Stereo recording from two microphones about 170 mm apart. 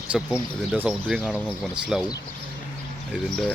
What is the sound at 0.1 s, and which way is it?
Speech, 5° right (ahead or behind).